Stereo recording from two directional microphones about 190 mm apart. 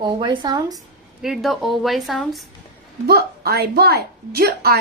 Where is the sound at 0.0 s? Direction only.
25° right (ahead or behind).